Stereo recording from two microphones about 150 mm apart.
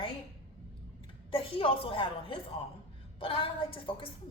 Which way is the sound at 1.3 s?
35° left (ahead or behind).